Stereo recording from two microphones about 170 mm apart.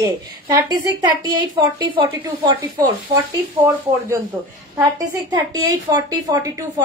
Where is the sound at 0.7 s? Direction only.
25° right (ahead or behind).